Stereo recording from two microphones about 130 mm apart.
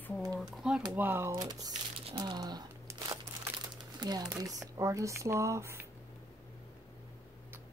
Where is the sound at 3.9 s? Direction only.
30° right (ahead or behind).